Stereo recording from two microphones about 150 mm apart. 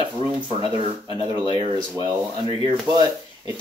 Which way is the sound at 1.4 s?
35° right (ahead or behind).